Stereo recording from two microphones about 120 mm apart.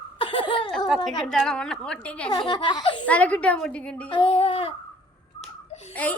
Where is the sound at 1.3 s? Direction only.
5° left (ahead or behind).